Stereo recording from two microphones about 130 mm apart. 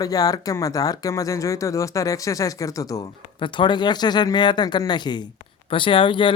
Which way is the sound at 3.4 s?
35° left (ahead or behind).